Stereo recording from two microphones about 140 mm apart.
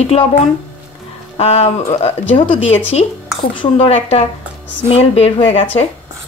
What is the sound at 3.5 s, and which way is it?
Speech, 40° left (ahead or behind).